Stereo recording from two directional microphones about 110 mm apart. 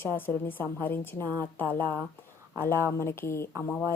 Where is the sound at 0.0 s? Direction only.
20° left (ahead or behind).